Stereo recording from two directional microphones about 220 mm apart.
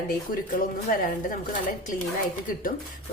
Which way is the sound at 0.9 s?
40° left (ahead or behind).